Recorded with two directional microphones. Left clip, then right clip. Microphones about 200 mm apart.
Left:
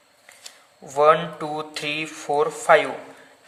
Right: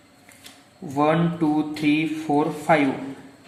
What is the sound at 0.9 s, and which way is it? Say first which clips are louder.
Speech: left 4 dB; 55° left (ahead or behind).